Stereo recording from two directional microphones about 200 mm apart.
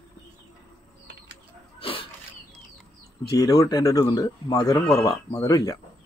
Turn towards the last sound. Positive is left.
turn(degrees=15)  # may be behind; listen again after turning